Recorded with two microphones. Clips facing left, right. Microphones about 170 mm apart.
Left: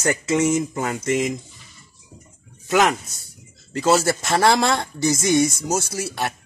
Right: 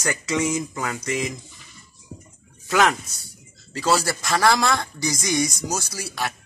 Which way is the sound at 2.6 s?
20° left (ahead or behind).